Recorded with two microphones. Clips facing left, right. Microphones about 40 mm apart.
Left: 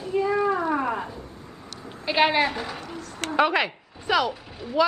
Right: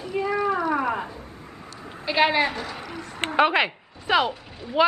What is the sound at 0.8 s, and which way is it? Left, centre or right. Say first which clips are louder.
Cat: right 1 dB; centre.